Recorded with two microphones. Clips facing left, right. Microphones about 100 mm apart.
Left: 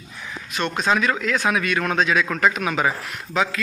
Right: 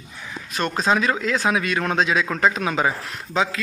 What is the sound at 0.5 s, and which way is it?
A man's voice, 35° right (ahead or behind).